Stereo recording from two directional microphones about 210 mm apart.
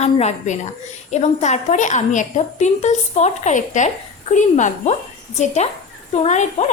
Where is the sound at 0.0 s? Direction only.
30° left (ahead or behind).